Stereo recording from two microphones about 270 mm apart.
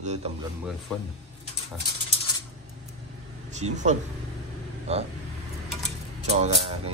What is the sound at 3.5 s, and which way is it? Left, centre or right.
Speech, right.